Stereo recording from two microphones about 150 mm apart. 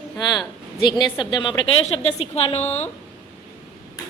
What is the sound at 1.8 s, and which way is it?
Speech, 40° left (ahead or behind).